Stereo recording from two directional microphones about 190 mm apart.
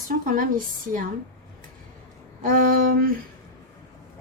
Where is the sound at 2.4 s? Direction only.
50° right (ahead or behind).